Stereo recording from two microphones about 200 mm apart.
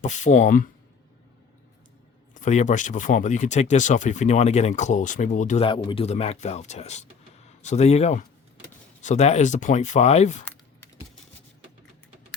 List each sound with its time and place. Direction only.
0.0 s speech: 35° left (ahead or behind)
2.3 s speech: 35° left (ahead or behind)